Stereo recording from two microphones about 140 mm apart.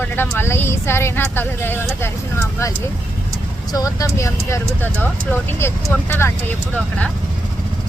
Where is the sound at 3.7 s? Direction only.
25° left (ahead or behind).